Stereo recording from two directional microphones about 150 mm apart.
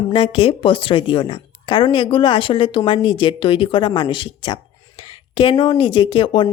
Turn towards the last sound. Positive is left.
turn(degrees=35)  # may be behind; listen again after turning